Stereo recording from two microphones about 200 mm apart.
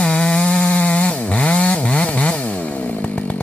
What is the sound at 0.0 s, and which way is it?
Chainsaw, 5° left (ahead or behind).